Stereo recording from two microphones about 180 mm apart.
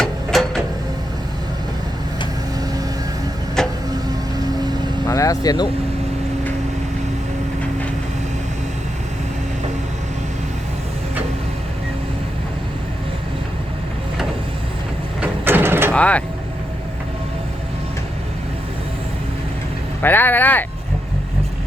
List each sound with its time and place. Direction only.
0.0 s a sound: centre (ahead or behind)
3.6 s vehicle: 5° left (ahead or behind)
5.0 s vehicle: 15° left (ahead or behind)
15.2 s printer: 10° right (ahead or behind)
15.9 s speech: 5° left (ahead or behind)
20.0 s speech: 10° left (ahead or behind)